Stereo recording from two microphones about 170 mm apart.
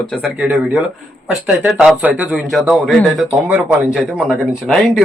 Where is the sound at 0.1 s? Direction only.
5° right (ahead or behind).